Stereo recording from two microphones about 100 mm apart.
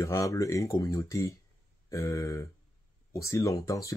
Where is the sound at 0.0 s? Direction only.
30° left (ahead or behind).